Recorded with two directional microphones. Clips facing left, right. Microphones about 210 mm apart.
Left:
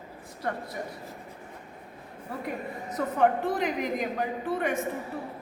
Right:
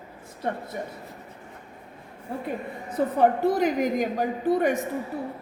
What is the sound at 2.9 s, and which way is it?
A woman's voice, 35° right (ahead or behind).